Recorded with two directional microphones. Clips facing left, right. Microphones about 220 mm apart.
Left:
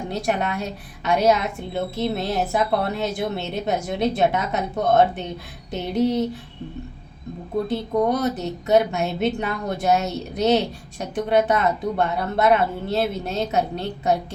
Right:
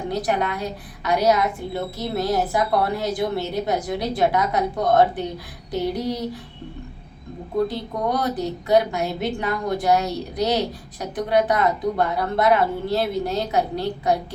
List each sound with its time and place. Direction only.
0.1 s a woman's voice: 25° left (ahead or behind)
7.7 s a woman's voice: 25° left (ahead or behind)